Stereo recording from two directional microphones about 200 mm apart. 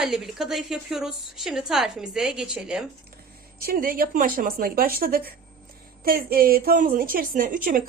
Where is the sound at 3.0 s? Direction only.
50° right (ahead or behind).